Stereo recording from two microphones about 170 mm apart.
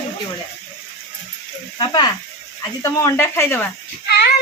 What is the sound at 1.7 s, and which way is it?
Speech, 25° left (ahead or behind).